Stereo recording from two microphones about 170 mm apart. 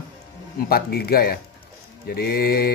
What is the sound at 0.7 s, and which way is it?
Speech, 65° left (ahead or behind).